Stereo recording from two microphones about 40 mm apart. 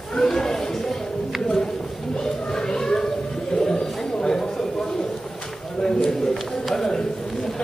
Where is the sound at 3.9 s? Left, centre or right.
Centre.